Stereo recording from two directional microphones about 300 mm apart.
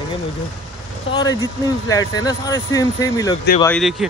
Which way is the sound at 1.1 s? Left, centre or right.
Centre.